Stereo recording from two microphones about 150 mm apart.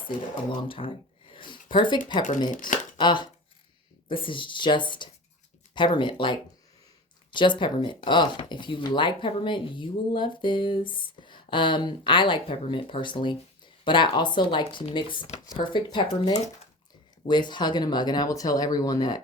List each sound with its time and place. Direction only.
0.5 s a sound: 35° left (ahead or behind)
1.7 s speech: 30° left (ahead or behind)
3.0 s speech: 30° left (ahead or behind)